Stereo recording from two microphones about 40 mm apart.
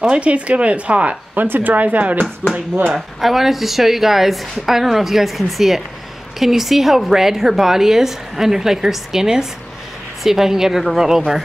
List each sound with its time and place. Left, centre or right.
0.1 s speech: right
1.3 s speech: right
3.2 s a woman's voice: centre